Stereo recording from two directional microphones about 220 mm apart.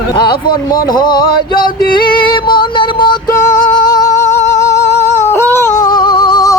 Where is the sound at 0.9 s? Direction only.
20° left (ahead or behind).